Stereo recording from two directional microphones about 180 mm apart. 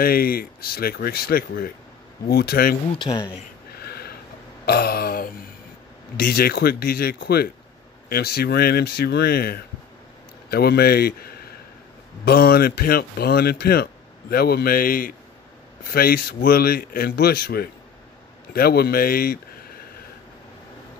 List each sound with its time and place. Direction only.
0.0 s speech: 55° left (ahead or behind)
3.0 s speech: 25° left (ahead or behind)
3.8 s a sound: 60° left (ahead or behind)
4.6 s a man's voice: 60° left (ahead or behind)